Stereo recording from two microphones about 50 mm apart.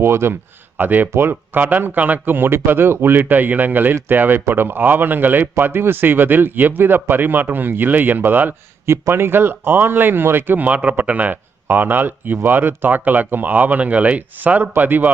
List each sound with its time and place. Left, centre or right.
0.0 s speech: right
0.8 s speech: right
1.1 s speech: right
1.5 s speech: right
8.9 s speech: right
10.7 s speech: right
11.7 s speech: right